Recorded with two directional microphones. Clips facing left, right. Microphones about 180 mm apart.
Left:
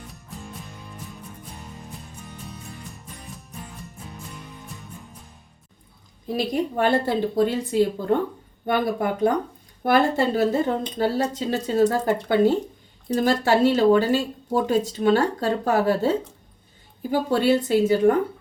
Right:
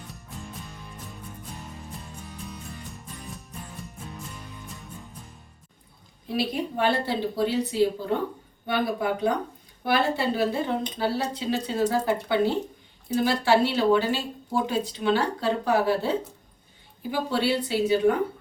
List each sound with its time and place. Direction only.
0.3 s music: centre (ahead or behind)
4.7 s music: centre (ahead or behind)
6.2 s speech: 45° left (ahead or behind)